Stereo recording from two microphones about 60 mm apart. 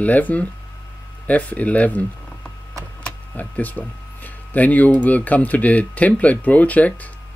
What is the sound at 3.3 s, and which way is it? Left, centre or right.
Speech, left.